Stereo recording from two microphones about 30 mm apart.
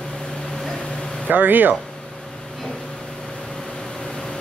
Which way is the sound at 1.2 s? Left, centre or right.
Right.